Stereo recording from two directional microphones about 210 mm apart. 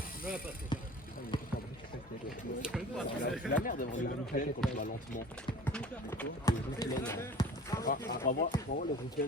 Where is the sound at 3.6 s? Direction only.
40° left (ahead or behind).